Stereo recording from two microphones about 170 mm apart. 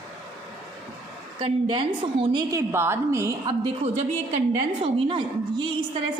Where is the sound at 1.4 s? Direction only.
30° right (ahead or behind).